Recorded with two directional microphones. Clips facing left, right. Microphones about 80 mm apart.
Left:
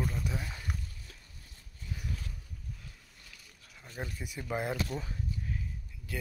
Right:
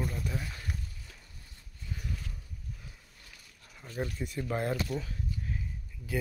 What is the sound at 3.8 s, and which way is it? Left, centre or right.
Speech, centre.